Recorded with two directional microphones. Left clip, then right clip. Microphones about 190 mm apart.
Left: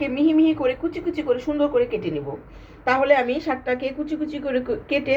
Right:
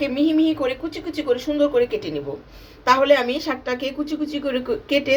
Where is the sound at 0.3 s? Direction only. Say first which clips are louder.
Left 3 dB; 40° right (ahead or behind).